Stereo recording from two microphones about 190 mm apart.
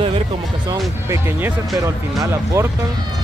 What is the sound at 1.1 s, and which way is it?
Speech, 10° right (ahead or behind).